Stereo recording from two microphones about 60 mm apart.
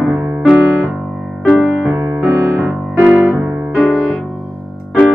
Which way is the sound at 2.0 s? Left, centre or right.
Right.